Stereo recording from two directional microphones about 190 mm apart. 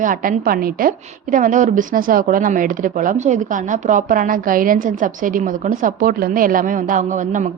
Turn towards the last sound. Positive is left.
turn(degrees=-40)  # may be behind; listen again after turning